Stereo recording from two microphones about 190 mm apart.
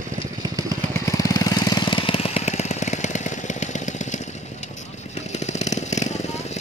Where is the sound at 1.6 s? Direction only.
20° left (ahead or behind); by 4.2 s 40° left (ahead or behind).